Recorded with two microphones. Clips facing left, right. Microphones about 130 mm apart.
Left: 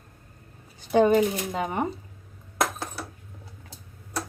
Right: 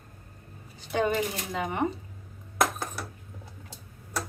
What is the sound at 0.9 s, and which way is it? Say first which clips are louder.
Speech: left 8 dB; 35° left (ahead or behind).